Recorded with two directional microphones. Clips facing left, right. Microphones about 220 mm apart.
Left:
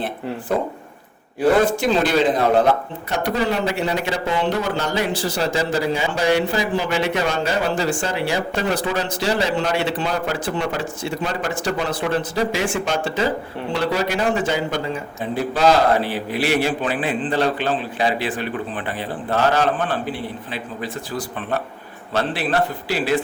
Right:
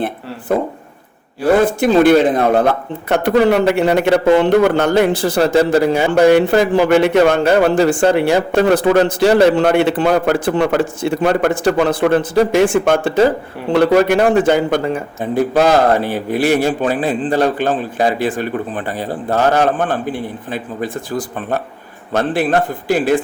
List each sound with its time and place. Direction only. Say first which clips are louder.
1.8 s a man's voice: right 8 dB; 55° right (ahead or behind)